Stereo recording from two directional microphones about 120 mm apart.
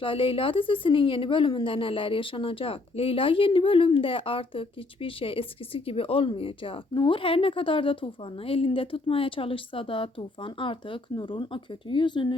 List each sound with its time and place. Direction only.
0.0 s a woman's voice: 45° left (ahead or behind)